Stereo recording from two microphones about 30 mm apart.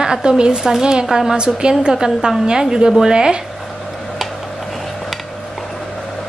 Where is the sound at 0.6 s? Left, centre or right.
Centre.